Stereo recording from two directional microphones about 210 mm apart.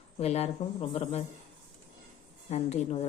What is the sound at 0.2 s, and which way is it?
Speech, 30° left (ahead or behind).